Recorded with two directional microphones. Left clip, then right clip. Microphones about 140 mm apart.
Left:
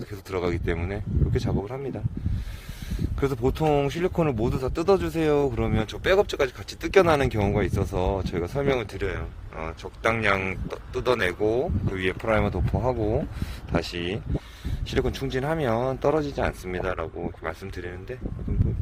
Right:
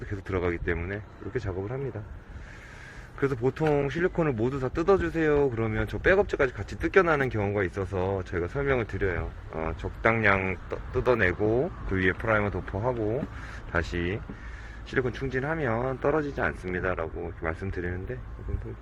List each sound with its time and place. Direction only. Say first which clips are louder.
0.1 s speech: left 1 dB; 25° left (ahead or behind)
3.2 s speech: left 2 dB; 30° left (ahead or behind)